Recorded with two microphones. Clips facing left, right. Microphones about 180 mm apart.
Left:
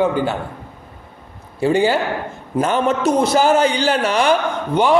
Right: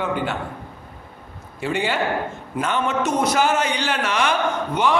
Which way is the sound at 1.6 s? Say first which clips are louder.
Left 7 dB; 35° left (ahead or behind).